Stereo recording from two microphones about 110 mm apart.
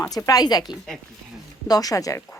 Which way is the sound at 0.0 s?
30° left (ahead or behind).